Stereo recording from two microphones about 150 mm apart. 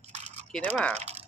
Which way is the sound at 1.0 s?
45° right (ahead or behind).